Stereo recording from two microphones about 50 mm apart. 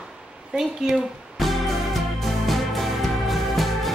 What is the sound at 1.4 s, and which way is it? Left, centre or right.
Music, centre.